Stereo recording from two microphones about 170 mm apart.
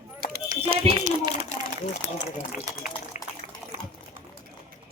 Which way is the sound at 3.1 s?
45° left (ahead or behind).